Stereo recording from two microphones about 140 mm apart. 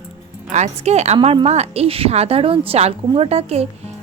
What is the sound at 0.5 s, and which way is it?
A woman's voice, 55° right (ahead or behind).